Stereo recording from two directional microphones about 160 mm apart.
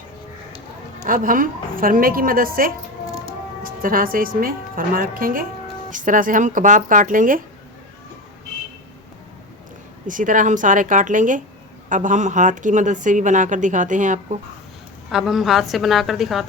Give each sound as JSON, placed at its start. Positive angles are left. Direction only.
{"t": 1.0, "sound": "a woman's voice", "side_deg": -60}
{"t": 10.1, "sound": "speech", "side_deg": -55}
{"t": 15.1, "sound": "a woman's voice", "side_deg": 0}